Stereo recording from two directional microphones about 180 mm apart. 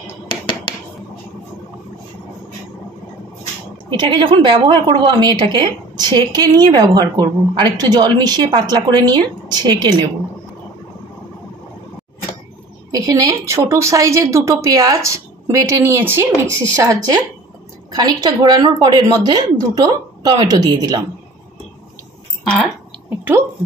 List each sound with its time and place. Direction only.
3.9 s a woman's voice: 25° right (ahead or behind)
12.9 s a woman's voice: 20° right (ahead or behind)
23.0 s a sound: 10° right (ahead or behind)